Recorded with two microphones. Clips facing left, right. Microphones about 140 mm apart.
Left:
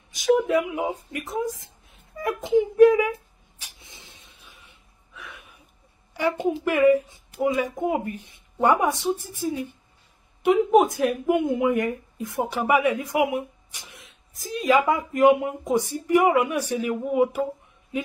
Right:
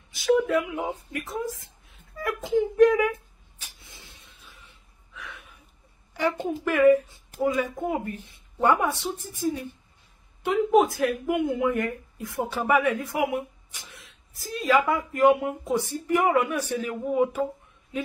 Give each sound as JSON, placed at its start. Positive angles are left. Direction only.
{"t": 0.4, "sound": "a child's voice", "side_deg": 15}
{"t": 2.8, "sound": "speech", "side_deg": 10}
{"t": 3.6, "sound": "a sound", "side_deg": 20}
{"t": 4.6, "sound": "gasp", "side_deg": 10}
{"t": 6.1, "sound": "speech", "side_deg": 10}